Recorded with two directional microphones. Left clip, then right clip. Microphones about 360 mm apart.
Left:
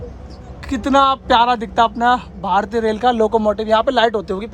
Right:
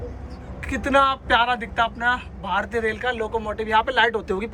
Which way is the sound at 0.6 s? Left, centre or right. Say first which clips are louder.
Left 5 dB; centre.